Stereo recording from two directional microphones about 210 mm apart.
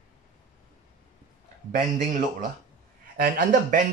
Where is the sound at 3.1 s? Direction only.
45° right (ahead or behind).